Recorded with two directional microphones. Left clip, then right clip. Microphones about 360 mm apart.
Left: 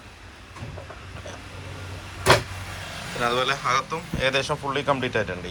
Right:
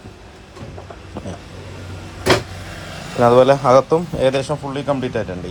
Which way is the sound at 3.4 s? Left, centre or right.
Centre.